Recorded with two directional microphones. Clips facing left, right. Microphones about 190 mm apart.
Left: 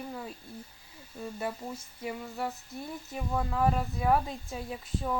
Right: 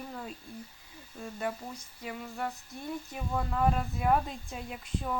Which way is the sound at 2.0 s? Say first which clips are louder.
Left 2 dB; 5° left (ahead or behind).